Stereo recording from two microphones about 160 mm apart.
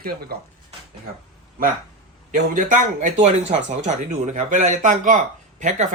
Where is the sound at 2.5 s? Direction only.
50° right (ahead or behind).